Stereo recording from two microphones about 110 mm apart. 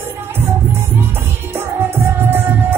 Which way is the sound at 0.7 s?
20° right (ahead or behind).